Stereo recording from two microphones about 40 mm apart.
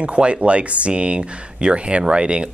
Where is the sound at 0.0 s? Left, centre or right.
Right.